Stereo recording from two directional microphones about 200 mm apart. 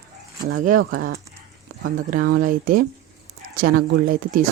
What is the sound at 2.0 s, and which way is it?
Speech, 40° right (ahead or behind).